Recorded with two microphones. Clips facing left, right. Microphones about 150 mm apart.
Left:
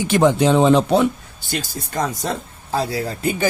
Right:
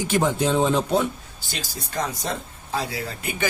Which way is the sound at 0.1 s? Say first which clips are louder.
Left 7 dB; 75° left (ahead or behind).